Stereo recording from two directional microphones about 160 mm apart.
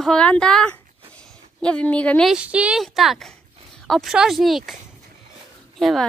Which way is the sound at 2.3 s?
10° right (ahead or behind).